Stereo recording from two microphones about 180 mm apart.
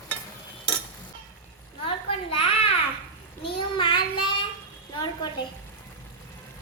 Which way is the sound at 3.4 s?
25° left (ahead or behind).